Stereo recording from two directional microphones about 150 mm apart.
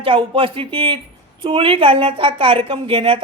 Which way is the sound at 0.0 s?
35° right (ahead or behind).